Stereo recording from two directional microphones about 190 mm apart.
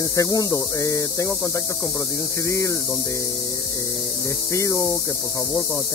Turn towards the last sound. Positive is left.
turn(degrees=15)  # may be behind; listen again after turning